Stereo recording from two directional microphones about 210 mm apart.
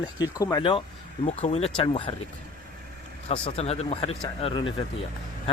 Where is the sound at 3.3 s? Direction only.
30° left (ahead or behind).